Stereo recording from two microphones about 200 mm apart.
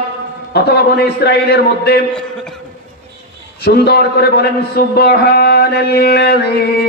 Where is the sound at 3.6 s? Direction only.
55° left (ahead or behind).